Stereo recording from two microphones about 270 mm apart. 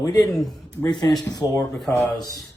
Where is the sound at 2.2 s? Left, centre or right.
Centre.